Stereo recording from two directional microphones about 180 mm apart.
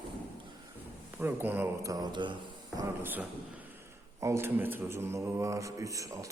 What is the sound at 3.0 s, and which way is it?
Speech, 10° right (ahead or behind).